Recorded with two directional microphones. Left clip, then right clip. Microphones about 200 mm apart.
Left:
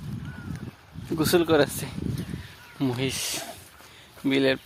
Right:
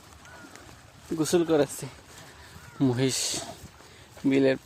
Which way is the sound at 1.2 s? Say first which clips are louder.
Left 3 dB; 20° left (ahead or behind).